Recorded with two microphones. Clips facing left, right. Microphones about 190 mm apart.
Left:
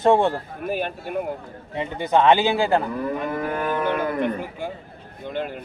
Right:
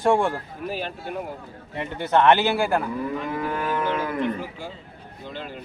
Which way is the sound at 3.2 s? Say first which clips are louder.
Left 2 dB; 50° left (ahead or behind).